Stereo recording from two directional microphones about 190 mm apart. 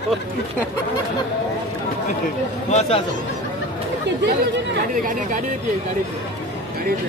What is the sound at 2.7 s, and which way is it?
Speech, 35° left (ahead or behind).